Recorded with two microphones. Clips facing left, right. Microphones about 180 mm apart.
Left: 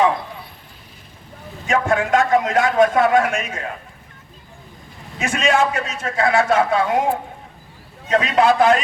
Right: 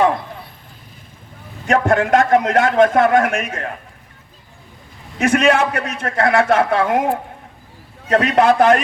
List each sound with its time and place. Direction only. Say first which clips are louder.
1.6 s a man's voice: right 3 dB; 55° right (ahead or behind)
5.2 s a man's voice: right 4 dB; 60° right (ahead or behind)
8.1 s a man's voice: right 2 dB; 55° right (ahead or behind)